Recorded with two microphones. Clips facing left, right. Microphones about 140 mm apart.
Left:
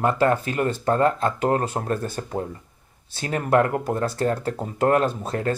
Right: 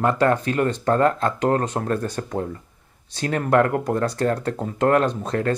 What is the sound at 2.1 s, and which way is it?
Speech, 25° left (ahead or behind).